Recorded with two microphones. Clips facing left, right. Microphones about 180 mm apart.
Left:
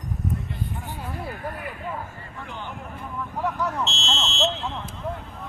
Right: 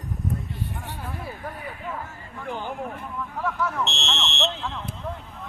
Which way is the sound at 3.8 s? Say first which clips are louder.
Left 1 dB; 60° right (ahead or behind).